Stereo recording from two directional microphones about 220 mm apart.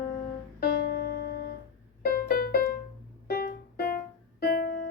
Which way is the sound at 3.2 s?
40° left (ahead or behind).